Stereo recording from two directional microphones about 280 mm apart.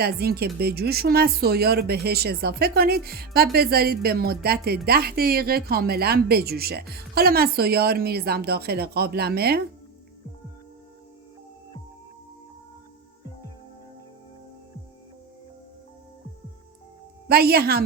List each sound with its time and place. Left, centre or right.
0.0 s speech: right
17.2 s speech: right